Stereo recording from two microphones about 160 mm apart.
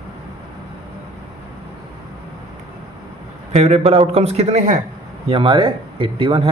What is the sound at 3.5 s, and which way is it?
A man's voice, 40° right (ahead or behind).